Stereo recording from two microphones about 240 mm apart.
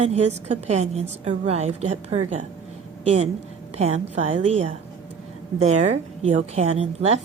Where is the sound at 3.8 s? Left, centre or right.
Right.